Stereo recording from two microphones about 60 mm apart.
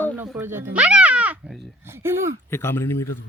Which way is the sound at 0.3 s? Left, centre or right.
Right.